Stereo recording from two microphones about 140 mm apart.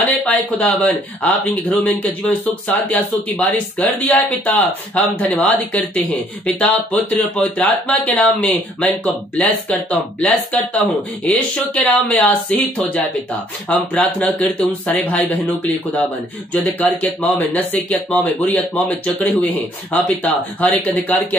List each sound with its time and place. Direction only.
0.2 s speech: 10° left (ahead or behind)